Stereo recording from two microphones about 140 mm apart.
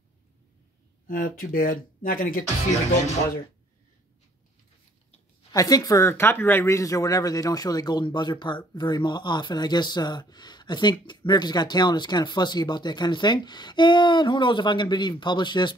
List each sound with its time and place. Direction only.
1.0 s speech: 90° left
5.5 s speech: 25° left (ahead or behind)